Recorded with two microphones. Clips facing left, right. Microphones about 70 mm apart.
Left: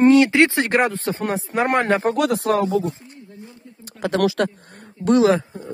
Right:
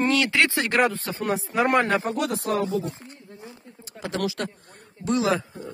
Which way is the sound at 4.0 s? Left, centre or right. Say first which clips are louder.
Left 9 dB; left.